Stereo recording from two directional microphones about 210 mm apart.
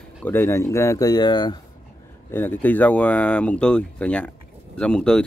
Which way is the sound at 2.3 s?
10° left (ahead or behind).